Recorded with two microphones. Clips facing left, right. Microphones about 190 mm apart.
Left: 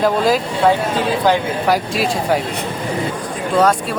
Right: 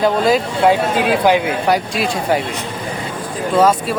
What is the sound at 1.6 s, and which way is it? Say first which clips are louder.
Speech: even; centre (ahead or behind).